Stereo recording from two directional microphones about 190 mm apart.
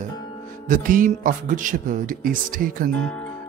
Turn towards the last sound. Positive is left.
turn(degrees=5)  # may be behind; listen again after turning